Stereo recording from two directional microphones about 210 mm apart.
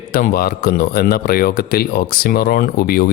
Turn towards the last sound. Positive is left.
turn(degrees=45)  # may be behind; listen again after turning